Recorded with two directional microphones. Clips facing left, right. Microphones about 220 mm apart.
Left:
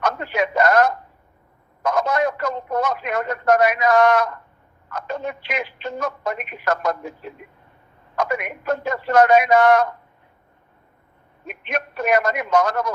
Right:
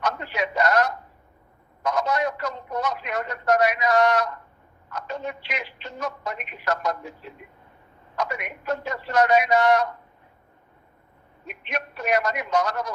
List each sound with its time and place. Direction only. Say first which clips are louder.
0.0 s a sound: left 5 dB; 50° left (ahead or behind)
4.9 s telephone: left 4 dB; 55° left (ahead or behind)
8.1 s speech: left 6 dB; 50° left (ahead or behind)
11.4 s speech: left 4 dB; 50° left (ahead or behind)